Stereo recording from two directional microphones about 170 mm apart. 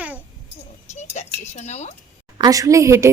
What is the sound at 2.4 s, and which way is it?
Speech, 20° right (ahead or behind).